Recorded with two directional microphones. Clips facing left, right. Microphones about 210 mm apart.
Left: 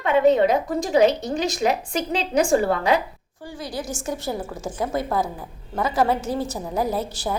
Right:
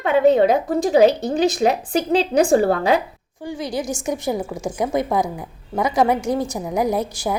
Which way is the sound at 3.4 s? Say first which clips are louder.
Right 6 dB; 15° right (ahead or behind).